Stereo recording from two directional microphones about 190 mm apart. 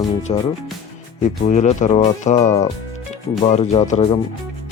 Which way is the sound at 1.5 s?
40° left (ahead or behind).